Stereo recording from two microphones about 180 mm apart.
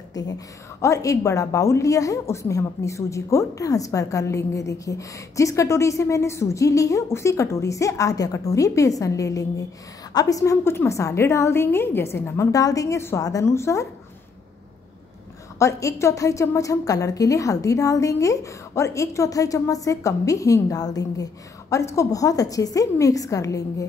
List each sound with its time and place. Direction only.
0.1 s a woman's voice: 20° left (ahead or behind)
15.6 s a woman's voice: 15° left (ahead or behind)